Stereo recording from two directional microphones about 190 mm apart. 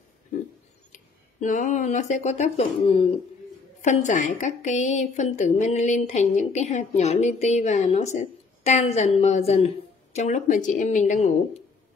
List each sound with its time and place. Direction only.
0.9 s a woman's voice: 40° left (ahead or behind)